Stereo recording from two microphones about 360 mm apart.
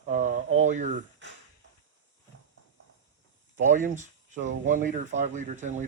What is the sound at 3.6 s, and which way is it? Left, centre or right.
Speech, right.